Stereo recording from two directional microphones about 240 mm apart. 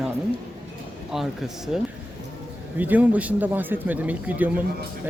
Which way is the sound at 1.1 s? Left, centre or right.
Centre.